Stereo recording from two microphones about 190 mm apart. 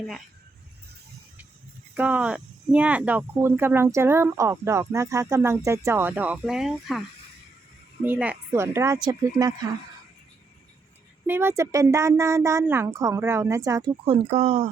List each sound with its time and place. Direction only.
2.0 s speech: 5° right (ahead or behind)
8.0 s speech: 10° right (ahead or behind)
11.3 s speech: 10° right (ahead or behind)
13.9 s speech: 30° right (ahead or behind)